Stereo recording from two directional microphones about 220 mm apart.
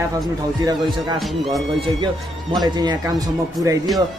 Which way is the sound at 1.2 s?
Centre (ahead or behind).